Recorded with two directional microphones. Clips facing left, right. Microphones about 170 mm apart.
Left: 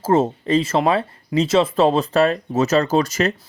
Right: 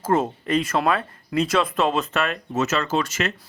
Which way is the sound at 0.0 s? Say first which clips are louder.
Left 4 dB; 30° left (ahead or behind).